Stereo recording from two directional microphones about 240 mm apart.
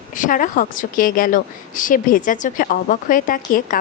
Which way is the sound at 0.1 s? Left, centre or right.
Left.